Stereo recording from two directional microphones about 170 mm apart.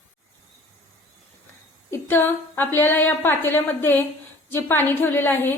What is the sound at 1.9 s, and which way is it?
A woman's voice, 10° left (ahead or behind).